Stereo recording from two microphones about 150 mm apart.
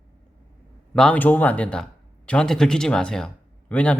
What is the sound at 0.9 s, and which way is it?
Speech, 10° left (ahead or behind).